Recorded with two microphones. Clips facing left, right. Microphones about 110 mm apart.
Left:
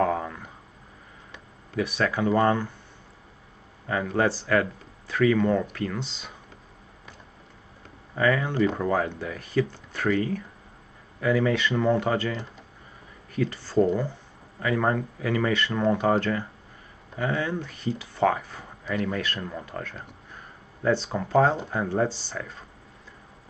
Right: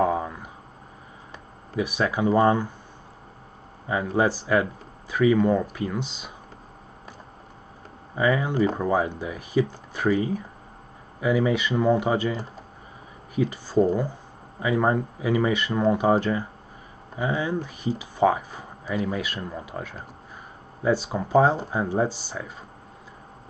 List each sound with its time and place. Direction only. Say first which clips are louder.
0.0 s a sound: right 2 dB; 15° right (ahead or behind)
1.8 s speech: right 1 dB; 15° right (ahead or behind)
3.8 s speech: right 2 dB; 15° right (ahead or behind)
8.2 s speech: right 1 dB; 15° right (ahead or behind)